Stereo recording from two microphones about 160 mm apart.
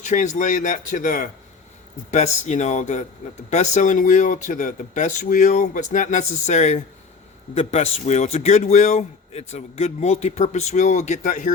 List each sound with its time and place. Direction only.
0.0 s a man's voice: 50° left (ahead or behind)